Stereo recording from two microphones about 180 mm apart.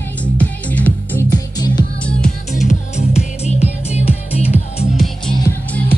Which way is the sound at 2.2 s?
40° left (ahead or behind).